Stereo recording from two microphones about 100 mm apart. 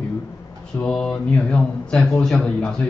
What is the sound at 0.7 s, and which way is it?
Speech, 10° left (ahead or behind).